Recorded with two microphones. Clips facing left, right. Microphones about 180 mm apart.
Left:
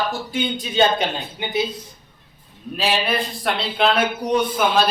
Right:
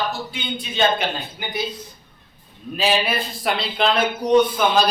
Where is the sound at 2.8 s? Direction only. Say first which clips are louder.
Even; centre (ahead or behind).